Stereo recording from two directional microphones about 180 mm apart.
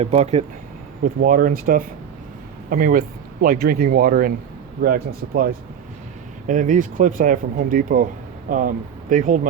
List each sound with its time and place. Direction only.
0.0 s speech: 35° right (ahead or behind)
1.0 s speech: 50° right (ahead or behind)
6.5 s speech: 45° right (ahead or behind)